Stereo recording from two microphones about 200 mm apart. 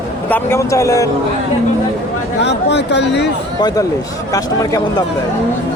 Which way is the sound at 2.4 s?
60° left (ahead or behind).